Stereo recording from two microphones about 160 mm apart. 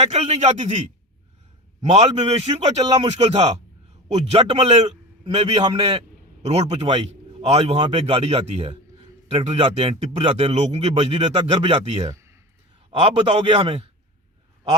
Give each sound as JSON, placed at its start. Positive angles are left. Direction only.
{"t": 0.0, "sound": "a man's voice", "side_deg": -40}
{"t": 1.8, "sound": "speech", "side_deg": -45}